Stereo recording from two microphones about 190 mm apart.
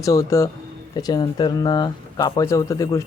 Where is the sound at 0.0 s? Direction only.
15° left (ahead or behind).